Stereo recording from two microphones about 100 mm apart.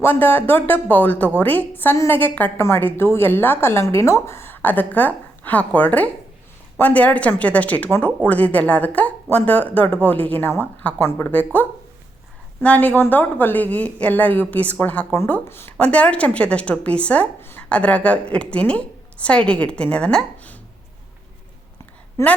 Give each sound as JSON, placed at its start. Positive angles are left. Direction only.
{"t": 0.0, "sound": "a woman's voice", "side_deg": 20}
{"t": 12.6, "sound": "a woman's voice", "side_deg": 15}
{"t": 22.2, "sound": "a woman's voice", "side_deg": 30}